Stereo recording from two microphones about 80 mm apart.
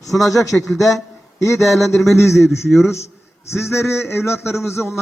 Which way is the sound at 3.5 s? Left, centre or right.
Left.